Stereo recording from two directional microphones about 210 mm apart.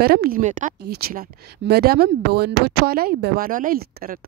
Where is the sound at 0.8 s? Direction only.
50° right (ahead or behind).